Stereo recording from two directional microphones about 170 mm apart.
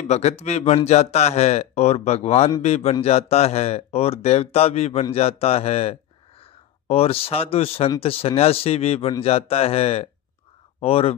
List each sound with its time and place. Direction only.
0.1 s speech: 40° left (ahead or behind)